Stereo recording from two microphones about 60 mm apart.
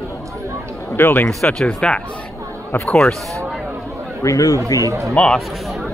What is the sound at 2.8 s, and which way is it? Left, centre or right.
Speech, centre.